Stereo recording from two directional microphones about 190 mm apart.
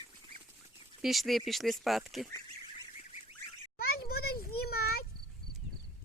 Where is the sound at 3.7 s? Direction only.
55° left (ahead or behind).